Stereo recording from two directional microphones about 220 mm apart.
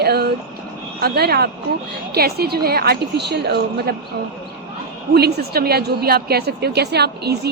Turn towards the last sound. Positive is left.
turn(degrees=-45)  # may be behind; listen again after turning